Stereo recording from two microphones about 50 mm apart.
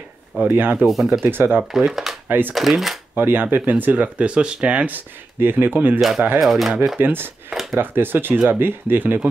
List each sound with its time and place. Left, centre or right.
0.5 s speech: right
0.8 s speech: centre
1.2 s speech: right
1.7 s speech: centre
2.2 s speech: right
2.5 s speech: centre
3.2 s speech: right
4.9 s speech: right
5.9 s speech: centre
7.0 s speech: right